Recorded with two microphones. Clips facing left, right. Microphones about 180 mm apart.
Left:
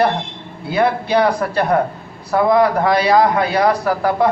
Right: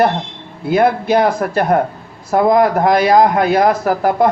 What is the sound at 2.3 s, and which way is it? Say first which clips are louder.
Speech: right 2 dB; 50° right (ahead or behind).